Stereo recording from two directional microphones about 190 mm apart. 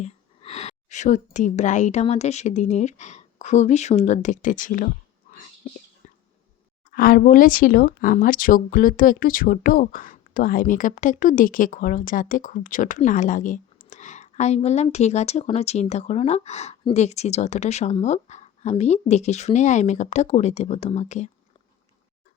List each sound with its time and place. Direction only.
0.0 s a woman's voice: 35° left (ahead or behind)
6.9 s speech: 50° left (ahead or behind)